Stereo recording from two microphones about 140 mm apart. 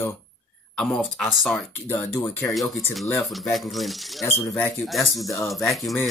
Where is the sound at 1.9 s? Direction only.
15° left (ahead or behind).